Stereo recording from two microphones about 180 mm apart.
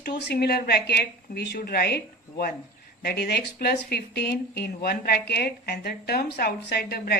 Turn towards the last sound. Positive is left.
turn(degrees=60)  # may be behind; listen again after turning